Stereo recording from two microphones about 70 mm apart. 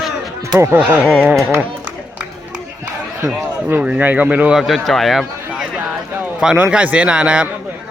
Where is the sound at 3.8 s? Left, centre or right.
Centre.